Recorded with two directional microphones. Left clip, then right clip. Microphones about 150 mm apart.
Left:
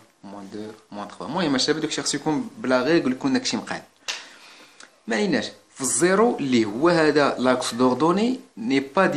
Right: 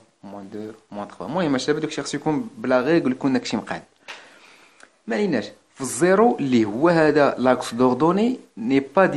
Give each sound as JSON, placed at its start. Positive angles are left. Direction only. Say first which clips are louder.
{"t": 0.3, "sound": "speech", "louder": "right 2 dB", "side_deg": -35}
{"t": 5.0, "sound": "speech", "louder": "even", "side_deg": -30}